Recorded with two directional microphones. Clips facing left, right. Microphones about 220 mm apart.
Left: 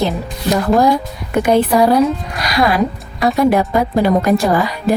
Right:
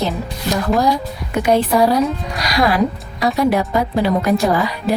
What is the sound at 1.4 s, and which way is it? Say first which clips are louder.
Speech: left 2 dB; 55° left (ahead or behind).